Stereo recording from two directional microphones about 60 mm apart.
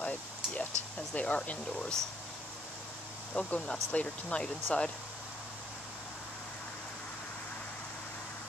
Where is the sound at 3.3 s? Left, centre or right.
Left.